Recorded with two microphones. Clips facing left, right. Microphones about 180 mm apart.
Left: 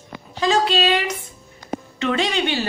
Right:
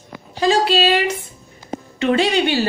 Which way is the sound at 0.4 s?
35° right (ahead or behind).